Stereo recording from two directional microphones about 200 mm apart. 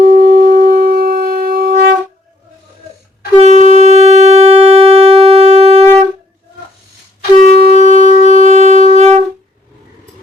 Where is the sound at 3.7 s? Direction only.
35° right (ahead or behind).